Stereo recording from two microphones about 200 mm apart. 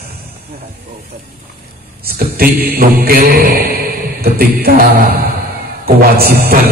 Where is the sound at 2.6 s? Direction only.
50° right (ahead or behind).